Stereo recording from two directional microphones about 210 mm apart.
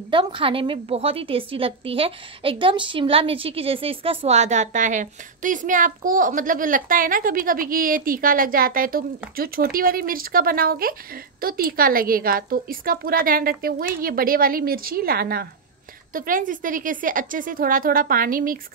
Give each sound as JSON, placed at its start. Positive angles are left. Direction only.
{"t": 0.1, "sound": "a woman's voice", "side_deg": -25}